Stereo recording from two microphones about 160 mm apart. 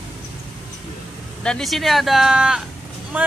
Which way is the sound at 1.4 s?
5° left (ahead or behind).